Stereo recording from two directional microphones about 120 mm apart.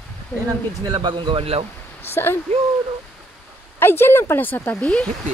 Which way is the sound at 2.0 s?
20° left (ahead or behind).